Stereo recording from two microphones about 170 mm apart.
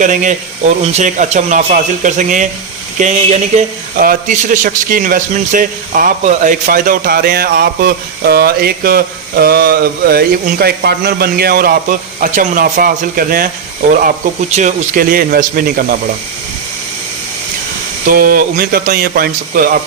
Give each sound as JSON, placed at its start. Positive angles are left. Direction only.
{"t": 0.0, "sound": "a man's voice", "side_deg": -50}
{"t": 14.5, "sound": "a man's voice", "side_deg": -50}
{"t": 18.1, "sound": "a man's voice", "side_deg": -60}